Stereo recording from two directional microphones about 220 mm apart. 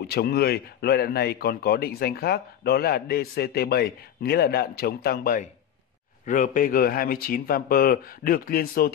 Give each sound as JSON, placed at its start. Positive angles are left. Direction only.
{"t": 0.0, "sound": "speech", "side_deg": 45}